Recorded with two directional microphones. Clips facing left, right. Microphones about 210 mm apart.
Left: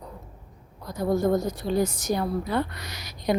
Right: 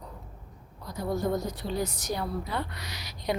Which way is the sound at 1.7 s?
45° left (ahead or behind).